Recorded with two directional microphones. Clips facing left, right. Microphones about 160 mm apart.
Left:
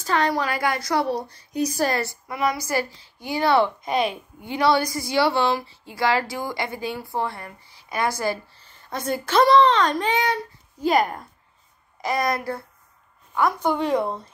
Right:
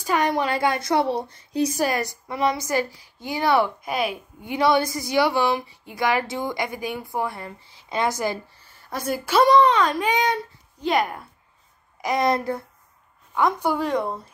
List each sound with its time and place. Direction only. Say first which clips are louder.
0.0 s a woman's voice: right 1 dB; 15° right (ahead or behind)
1.8 s a woman's voice: even; 15° right (ahead or behind)
2.3 s a woman's voice: right 1 dB; 25° right (ahead or behind); by 4.2 s 5° right (ahead or behind)
4.4 s a woman's voice: even; 20° right (ahead or behind)
10.1 s a woman's voice: right 1 dB; 20° right (ahead or behind)
10.8 s speech: left 2 dB; centre (ahead or behind)
12.0 s a woman's voice: right 2 dB; 20° right (ahead or behind)
13.7 s speech: left 1 dB; centre (ahead or behind)